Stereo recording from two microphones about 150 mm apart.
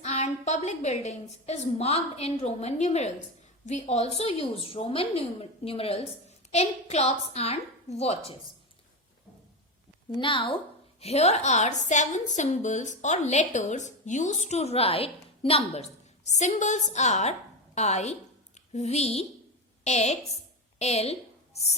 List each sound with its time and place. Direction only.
0.0 s a woman's voice: 45° left (ahead or behind)
10.2 s a woman's voice: 35° left (ahead or behind)
11.0 s a woman's voice: 45° left (ahead or behind)